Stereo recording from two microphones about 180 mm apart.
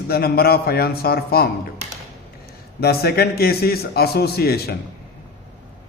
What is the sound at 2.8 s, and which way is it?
Speech, 60° left (ahead or behind).